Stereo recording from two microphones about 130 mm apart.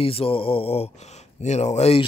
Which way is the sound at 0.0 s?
45° left (ahead or behind).